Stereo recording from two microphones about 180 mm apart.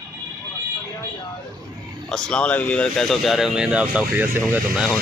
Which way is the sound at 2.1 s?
5° left (ahead or behind).